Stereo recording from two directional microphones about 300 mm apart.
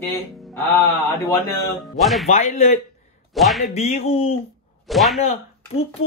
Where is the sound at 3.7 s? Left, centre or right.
Left.